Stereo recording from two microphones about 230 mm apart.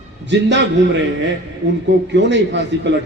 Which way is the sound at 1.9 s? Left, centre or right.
Right.